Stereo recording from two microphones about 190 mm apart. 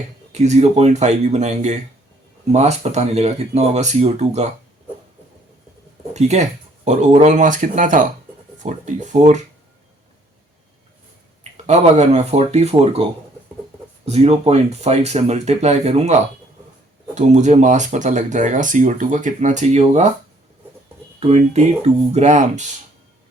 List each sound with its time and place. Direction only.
0.3 s speech: 35° right (ahead or behind)
6.1 s speech: 35° right (ahead or behind)
11.5 s speech: 35° right (ahead or behind)
21.2 s speech: 35° right (ahead or behind)